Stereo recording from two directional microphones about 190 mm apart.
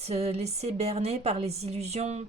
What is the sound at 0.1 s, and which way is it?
A woman's voice, 35° right (ahead or behind).